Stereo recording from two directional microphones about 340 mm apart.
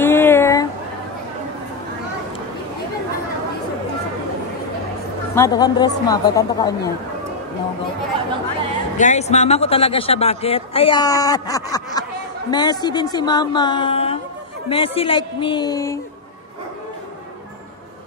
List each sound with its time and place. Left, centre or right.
0.0 s a sound: centre
5.3 s a man's voice: centre
8.9 s a man's voice: left